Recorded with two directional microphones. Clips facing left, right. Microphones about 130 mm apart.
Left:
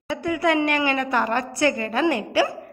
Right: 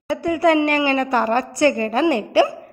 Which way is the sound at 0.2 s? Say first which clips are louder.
Right 4 dB; 30° right (ahead or behind).